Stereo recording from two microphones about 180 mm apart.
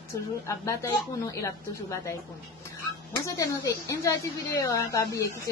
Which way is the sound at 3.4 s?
20° left (ahead or behind).